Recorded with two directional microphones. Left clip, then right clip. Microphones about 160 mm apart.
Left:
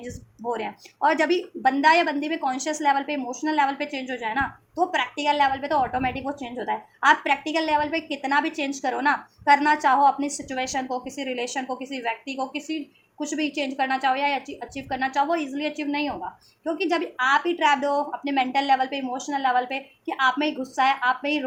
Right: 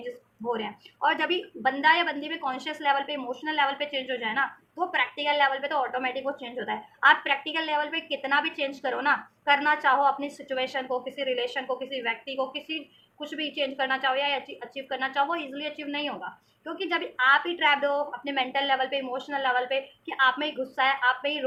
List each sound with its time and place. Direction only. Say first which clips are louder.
0.5 s speech: left 2 dB; 50° left (ahead or behind)